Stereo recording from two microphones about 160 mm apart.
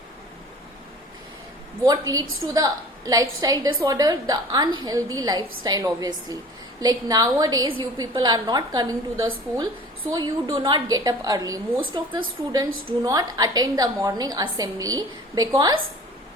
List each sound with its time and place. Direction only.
1.8 s a woman's voice: 25° right (ahead or behind)